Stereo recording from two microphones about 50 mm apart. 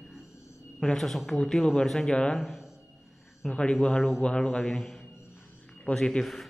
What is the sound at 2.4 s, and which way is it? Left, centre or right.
Speech, centre.